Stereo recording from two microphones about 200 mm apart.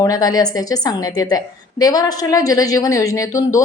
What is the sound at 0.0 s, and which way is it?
A woman's voice, 20° left (ahead or behind).